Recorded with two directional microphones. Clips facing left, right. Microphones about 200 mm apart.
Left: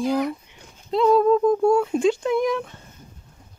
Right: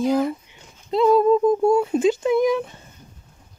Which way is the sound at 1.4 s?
20° right (ahead or behind).